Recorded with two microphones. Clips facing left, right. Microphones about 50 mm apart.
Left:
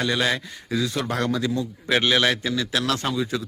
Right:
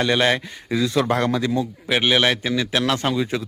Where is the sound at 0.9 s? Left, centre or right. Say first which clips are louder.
Right 8 dB; right.